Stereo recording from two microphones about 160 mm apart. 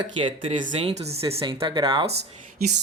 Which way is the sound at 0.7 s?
40° right (ahead or behind).